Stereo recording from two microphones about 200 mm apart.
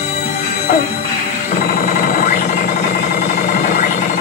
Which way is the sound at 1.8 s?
40° left (ahead or behind).